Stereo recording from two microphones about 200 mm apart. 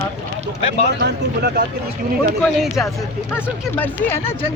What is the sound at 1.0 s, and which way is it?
Speech, 55° right (ahead or behind).